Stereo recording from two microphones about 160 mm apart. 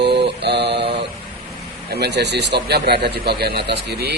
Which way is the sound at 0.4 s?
90° right.